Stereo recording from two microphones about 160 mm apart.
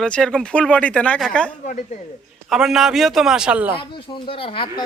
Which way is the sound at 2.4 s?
Centre (ahead or behind).